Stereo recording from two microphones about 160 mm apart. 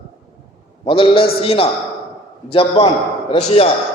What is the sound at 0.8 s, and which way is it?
A man's voice, 35° left (ahead or behind).